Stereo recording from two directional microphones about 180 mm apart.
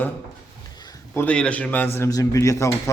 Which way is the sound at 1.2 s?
5° left (ahead or behind).